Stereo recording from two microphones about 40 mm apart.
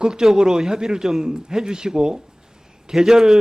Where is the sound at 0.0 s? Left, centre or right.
Centre.